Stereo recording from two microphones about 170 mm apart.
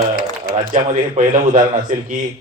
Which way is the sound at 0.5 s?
45° right (ahead or behind).